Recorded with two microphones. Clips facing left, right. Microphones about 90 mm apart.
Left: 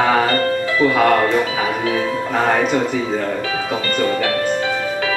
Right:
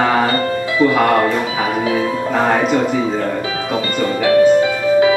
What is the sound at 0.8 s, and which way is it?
Speech, 5° right (ahead or behind).